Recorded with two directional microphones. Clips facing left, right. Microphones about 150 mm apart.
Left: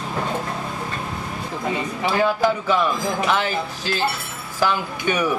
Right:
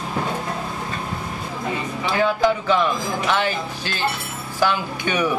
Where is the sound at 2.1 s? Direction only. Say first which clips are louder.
Even; 5° left (ahead or behind).